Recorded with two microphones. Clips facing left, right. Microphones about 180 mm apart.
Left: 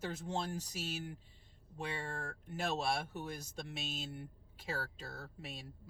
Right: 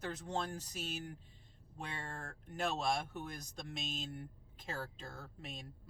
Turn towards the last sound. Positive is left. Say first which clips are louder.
# left 1 dB
turn(degrees=10)  # may be behind; listen again after turning